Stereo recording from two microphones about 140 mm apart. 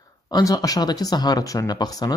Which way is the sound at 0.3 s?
25° left (ahead or behind).